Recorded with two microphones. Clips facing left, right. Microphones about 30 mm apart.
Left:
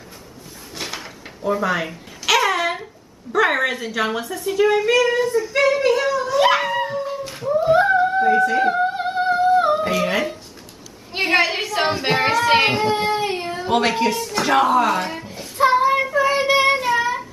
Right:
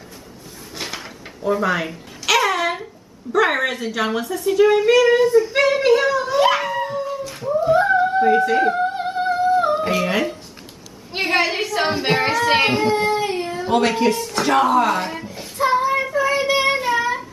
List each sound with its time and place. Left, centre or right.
0.7 s a sound: centre
5.5 s speech: centre
6.4 s dog: centre
7.5 s a sound: left
7.9 s a sound: centre
8.3 s speech: centre
8.6 s music: centre
9.8 s cat: centre
10.0 s child singing: centre
12.9 s speech: left; by 15.2 s centre
15.7 s child singing: centre
16.8 s child singing: centre